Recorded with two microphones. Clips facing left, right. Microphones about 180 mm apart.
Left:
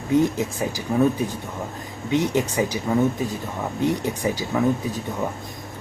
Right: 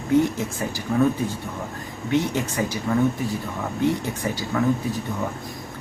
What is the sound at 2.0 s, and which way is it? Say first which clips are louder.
Speech: left 1 dB; 15° left (ahead or behind).